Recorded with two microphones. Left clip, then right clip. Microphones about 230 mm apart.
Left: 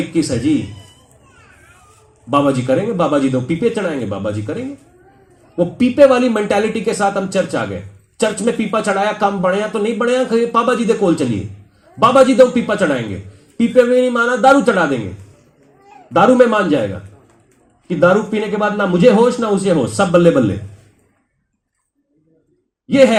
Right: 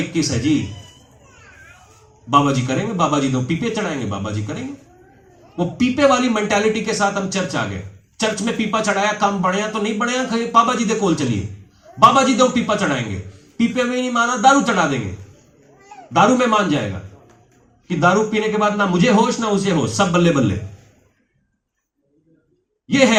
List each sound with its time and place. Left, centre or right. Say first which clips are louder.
0.1 s speech: left 5 dB; right
2.3 s speech: left 2 dB; right
16.1 s speech: left 4 dB; right
17.8 s speech: left 3 dB; right